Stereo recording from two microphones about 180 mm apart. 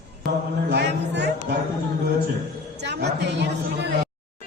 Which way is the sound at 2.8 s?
70° right (ahead or behind).